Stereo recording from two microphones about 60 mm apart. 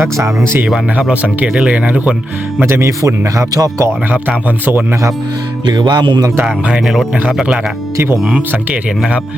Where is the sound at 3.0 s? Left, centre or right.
Right.